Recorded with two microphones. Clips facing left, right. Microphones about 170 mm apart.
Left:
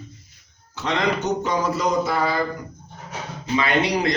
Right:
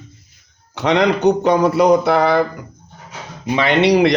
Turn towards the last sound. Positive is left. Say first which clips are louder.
# right 8 dB
turn(degrees=-75)  # may be behind; listen again after turning